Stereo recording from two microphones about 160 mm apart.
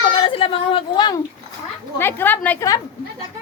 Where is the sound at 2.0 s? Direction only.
15° left (ahead or behind).